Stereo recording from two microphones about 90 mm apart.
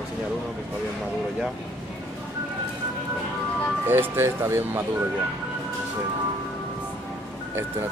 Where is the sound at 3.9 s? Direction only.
25° right (ahead or behind).